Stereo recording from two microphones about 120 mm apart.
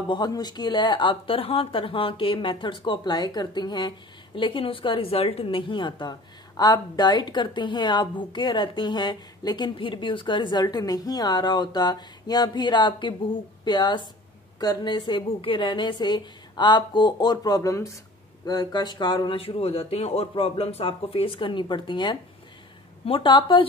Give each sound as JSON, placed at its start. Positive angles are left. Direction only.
{"t": 0.1, "sound": "a woman's voice", "side_deg": 35}